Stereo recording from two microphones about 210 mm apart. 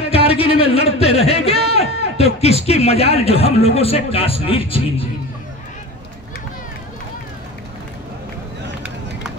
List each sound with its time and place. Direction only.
0.1 s speech: 25° left (ahead or behind)